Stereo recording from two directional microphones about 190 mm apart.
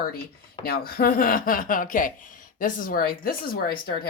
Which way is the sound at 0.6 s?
50° left (ahead or behind).